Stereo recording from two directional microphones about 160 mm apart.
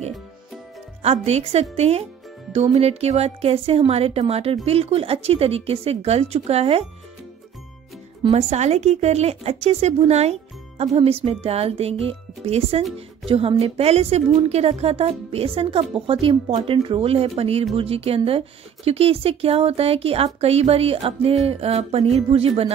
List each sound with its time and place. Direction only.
1.0 s a woman's voice: 40° right (ahead or behind)
8.2 s a woman's voice: 40° right (ahead or behind)